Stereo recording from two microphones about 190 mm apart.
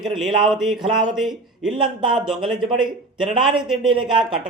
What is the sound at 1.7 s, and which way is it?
Speech, 25° right (ahead or behind).